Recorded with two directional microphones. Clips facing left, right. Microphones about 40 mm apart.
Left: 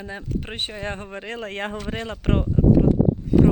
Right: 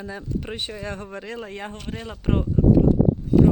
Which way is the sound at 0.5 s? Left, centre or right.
Left.